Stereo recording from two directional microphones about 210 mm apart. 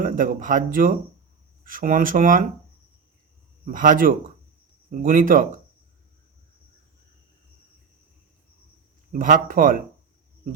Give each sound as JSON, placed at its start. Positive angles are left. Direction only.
{"t": 0.0, "sound": "speech", "side_deg": -40}
{"t": 3.7, "sound": "speech", "side_deg": -40}
{"t": 9.1, "sound": "speech", "side_deg": -40}